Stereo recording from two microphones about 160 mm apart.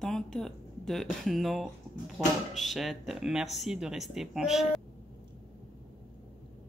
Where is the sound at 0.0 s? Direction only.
5° left (ahead or behind).